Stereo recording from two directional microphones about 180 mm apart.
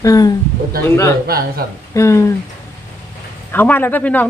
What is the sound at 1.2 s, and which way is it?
Speech, 55° right (ahead or behind).